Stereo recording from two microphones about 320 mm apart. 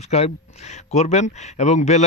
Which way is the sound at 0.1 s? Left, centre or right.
Centre.